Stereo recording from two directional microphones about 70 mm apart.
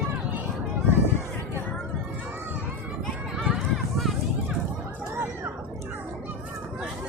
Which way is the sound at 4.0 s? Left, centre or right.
Centre.